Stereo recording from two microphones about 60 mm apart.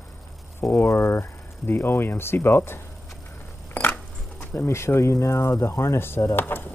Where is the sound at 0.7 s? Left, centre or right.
Left.